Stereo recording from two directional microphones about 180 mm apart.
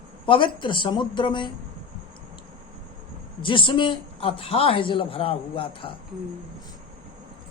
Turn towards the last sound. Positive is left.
turn(degrees=30)  # may be behind; listen again after turning